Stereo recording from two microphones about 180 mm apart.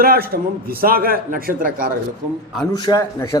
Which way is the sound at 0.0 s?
55° right (ahead or behind).